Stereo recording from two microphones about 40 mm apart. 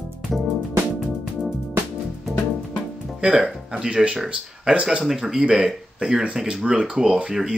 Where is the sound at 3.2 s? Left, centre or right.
Right.